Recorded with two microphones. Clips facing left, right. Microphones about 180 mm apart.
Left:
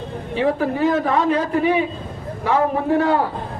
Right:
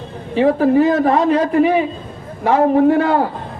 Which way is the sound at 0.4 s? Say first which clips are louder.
Right 6 dB; 45° right (ahead or behind).